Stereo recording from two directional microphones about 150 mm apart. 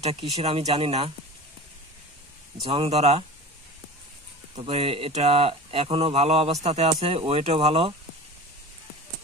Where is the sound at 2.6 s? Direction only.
40° right (ahead or behind).